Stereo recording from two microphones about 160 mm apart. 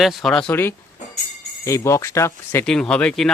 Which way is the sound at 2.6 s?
5° left (ahead or behind).